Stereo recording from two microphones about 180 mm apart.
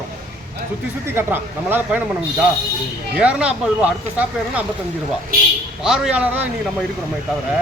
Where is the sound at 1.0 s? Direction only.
10° right (ahead or behind).